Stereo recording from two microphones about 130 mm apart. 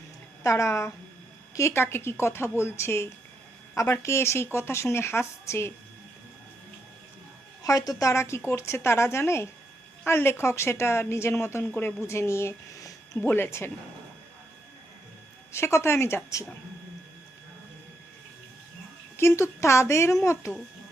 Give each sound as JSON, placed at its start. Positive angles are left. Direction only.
{"t": 0.4, "sound": "speech", "side_deg": 25}
{"t": 7.6, "sound": "speech", "side_deg": 25}
{"t": 15.5, "sound": "speech", "side_deg": 20}
{"t": 19.1, "sound": "speech", "side_deg": 20}